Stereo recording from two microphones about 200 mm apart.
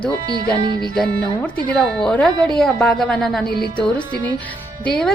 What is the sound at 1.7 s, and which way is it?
A woman's voice, 5° left (ahead or behind).